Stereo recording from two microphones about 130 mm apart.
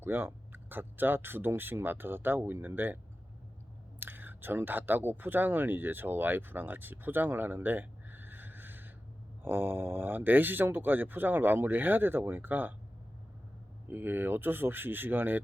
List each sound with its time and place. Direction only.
0.0 s speech: 15° right (ahead or behind)
4.0 s speech: 15° right (ahead or behind)
13.9 s speech: 15° right (ahead or behind)